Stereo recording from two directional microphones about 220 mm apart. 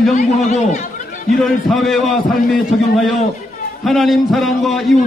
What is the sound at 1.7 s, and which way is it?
Speech, centre (ahead or behind).